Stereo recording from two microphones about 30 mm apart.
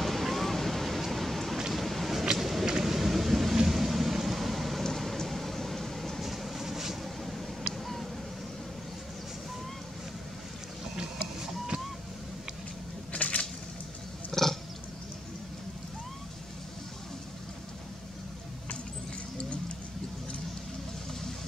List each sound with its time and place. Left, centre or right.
0.0 s a sound: centre
2.3 s vehicle: centre
2.8 s thunder: centre
3.6 s vehicle: centre
4.8 s vehicle: centre
6.2 s vehicle: centre
7.2 s a sound: centre
13.1 s a sound: left
14.3 s wild animals: centre